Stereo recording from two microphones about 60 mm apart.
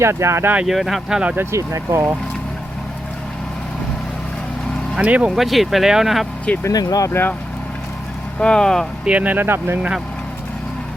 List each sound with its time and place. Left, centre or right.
0.0 s speech: right
0.6 s speech: centre
1.4 s speech: right
4.9 s speech: right
5.3 s speech: centre
6.7 s speech: left
7.1 s speech: left
8.4 s speech: centre
9.0 s speech: right